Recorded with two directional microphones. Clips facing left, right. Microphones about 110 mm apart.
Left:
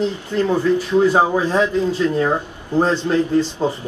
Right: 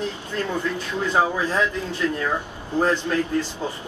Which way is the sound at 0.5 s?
25° left (ahead or behind).